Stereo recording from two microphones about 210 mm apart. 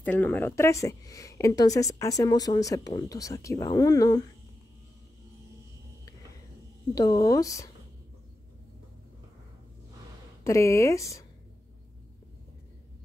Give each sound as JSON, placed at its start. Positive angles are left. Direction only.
{"t": 0.0, "sound": "a woman's voice", "side_deg": 10}
{"t": 7.0, "sound": "a woman's voice", "side_deg": 15}
{"t": 10.4, "sound": "a woman's voice", "side_deg": 15}